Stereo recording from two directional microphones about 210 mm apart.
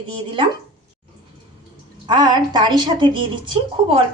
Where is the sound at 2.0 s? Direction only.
20° right (ahead or behind).